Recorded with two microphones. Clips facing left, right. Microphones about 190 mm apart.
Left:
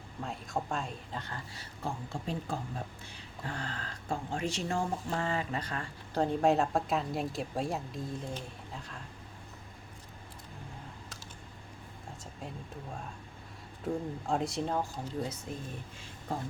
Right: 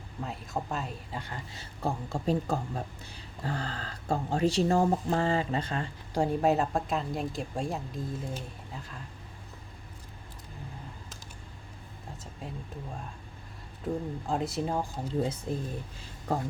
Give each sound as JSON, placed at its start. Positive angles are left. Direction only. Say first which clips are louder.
{"t": 0.2, "sound": "speech", "louder": "right 1 dB", "side_deg": -5}
{"t": 1.5, "sound": "speech", "louder": "right 7 dB", "side_deg": -35}
{"t": 6.1, "sound": "speech", "louder": "right 1 dB", "side_deg": -5}
{"t": 13.8, "sound": "speech", "louder": "right 1 dB", "side_deg": 0}
{"t": 14.9, "sound": "speech", "louder": "right 6 dB", "side_deg": -30}